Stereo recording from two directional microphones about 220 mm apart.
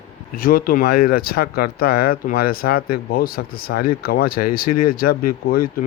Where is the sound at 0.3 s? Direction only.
40° left (ahead or behind).